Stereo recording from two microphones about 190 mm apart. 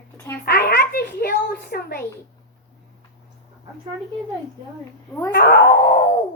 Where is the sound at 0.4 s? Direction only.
55° left (ahead or behind).